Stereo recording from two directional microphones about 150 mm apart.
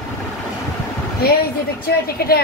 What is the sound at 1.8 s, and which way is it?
Speech, 90° left.